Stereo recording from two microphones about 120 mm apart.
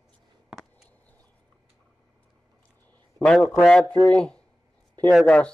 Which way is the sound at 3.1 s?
10° left (ahead or behind).